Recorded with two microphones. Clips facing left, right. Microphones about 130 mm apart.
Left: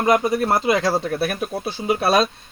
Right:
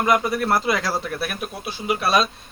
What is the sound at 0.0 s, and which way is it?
Speech, 25° left (ahead or behind).